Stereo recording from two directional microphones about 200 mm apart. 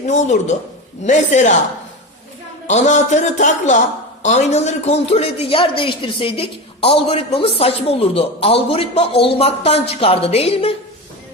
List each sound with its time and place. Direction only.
0.1 s speech: 35° left (ahead or behind)
2.6 s a man's voice: 35° left (ahead or behind)